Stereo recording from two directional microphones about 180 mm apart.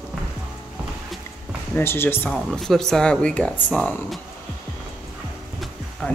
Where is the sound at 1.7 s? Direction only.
10° left (ahead or behind).